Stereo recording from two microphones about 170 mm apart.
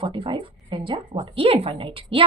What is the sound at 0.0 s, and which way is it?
A woman's voice, 30° right (ahead or behind).